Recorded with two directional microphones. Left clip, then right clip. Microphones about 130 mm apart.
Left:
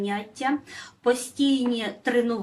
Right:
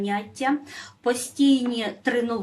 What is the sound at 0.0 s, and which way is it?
A woman's voice, 35° right (ahead or behind).